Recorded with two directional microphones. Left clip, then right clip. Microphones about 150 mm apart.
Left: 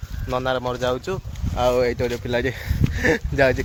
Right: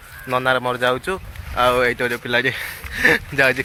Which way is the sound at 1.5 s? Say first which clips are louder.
Right 3 dB; 20° left (ahead or behind).